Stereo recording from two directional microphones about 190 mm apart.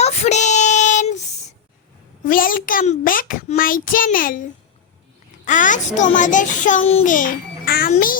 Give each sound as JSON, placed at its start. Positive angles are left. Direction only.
{"t": 0.0, "sound": "child singing", "side_deg": 35}
{"t": 2.2, "sound": "a child's voice", "side_deg": 45}
{"t": 5.5, "sound": "a child's voice", "side_deg": 40}